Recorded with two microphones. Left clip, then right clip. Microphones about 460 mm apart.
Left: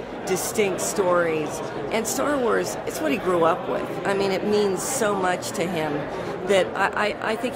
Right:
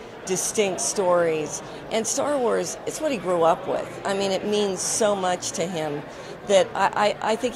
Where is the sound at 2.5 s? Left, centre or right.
Right.